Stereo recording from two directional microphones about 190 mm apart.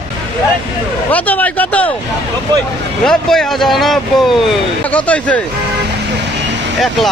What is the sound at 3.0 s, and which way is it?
A man's voice, 5° left (ahead or behind).